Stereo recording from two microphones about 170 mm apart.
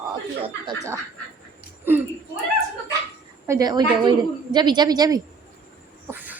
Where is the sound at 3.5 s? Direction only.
20° right (ahead or behind).